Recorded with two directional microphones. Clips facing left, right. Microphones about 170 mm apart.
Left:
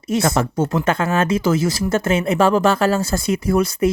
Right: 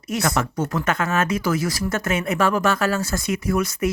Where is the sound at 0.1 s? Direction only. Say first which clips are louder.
Left 5 dB; 25° left (ahead or behind).